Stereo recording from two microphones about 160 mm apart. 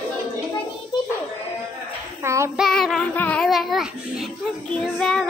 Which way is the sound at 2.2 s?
20° right (ahead or behind).